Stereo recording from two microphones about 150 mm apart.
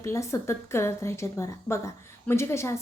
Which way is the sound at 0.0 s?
20° left (ahead or behind).